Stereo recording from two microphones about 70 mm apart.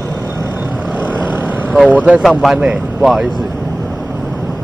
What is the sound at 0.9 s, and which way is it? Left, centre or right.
Vehicle, right.